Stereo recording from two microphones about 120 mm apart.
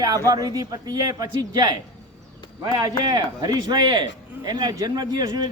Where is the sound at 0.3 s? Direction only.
30° right (ahead or behind).